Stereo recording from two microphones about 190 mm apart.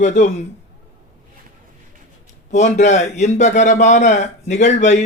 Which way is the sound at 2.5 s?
40° left (ahead or behind).